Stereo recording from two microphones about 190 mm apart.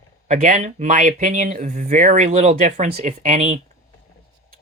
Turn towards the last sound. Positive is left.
turn(degrees=-40)  # may be behind; listen again after turning